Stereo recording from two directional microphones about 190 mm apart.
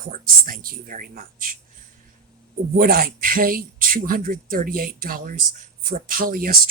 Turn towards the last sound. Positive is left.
turn(degrees=-50)  # may be behind; listen again after turning